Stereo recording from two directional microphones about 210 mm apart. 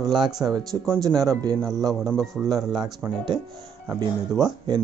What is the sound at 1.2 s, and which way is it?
Speech, 15° right (ahead or behind).